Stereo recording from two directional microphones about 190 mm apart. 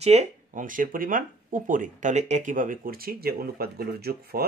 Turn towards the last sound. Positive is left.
turn(degrees=-55)  # may be behind; listen again after turning